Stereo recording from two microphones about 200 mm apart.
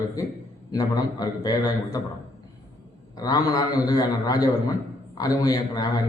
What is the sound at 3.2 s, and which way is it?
A man's voice, 20° left (ahead or behind).